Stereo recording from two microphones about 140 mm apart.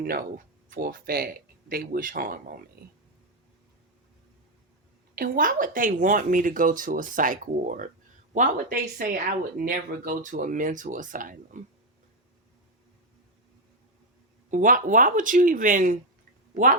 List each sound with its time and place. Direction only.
0.0 s speech: 90° right
5.1 s speech: 85° right
14.5 s speech: 70° right (ahead or behind)